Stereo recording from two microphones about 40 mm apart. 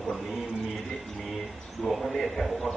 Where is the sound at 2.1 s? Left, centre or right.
Centre.